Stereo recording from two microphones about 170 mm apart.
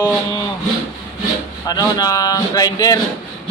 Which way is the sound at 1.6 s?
20° left (ahead or behind).